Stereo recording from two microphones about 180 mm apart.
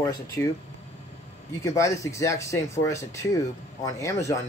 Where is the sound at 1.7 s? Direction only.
15° left (ahead or behind).